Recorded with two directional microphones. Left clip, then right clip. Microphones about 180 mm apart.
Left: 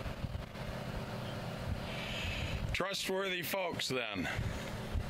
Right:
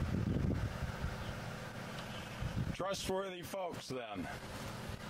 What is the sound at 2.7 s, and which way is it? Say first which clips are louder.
Speech: left 3 dB; centre (ahead or behind).